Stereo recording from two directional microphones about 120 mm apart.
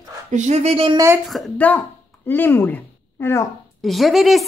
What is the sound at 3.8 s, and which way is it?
Speech, centre (ahead or behind).